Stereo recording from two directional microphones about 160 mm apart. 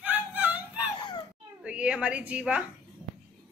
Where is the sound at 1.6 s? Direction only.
5° right (ahead or behind).